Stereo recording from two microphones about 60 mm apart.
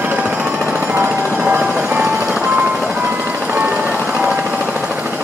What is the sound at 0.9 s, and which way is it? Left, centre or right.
Jackhammer, right.